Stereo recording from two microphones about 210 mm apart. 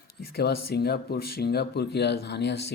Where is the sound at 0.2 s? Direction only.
50° left (ahead or behind).